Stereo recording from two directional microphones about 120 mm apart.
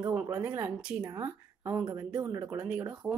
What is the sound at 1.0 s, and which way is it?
A woman's voice, 25° right (ahead or behind).